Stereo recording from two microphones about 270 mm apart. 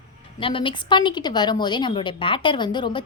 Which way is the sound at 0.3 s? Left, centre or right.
Centre.